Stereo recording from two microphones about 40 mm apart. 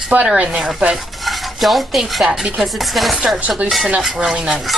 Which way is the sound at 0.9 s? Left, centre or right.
Centre.